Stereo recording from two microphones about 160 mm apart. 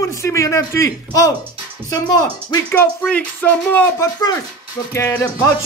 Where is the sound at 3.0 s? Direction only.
10° left (ahead or behind).